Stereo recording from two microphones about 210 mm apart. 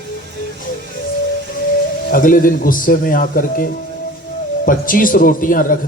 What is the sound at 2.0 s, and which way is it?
A man's voice, 40° left (ahead or behind).